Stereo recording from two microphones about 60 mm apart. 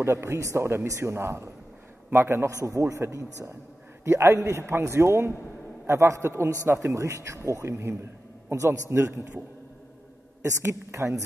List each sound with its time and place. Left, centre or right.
0.0 s a man's voice: right
2.5 s a man's voice: right
10.6 s a man's voice: right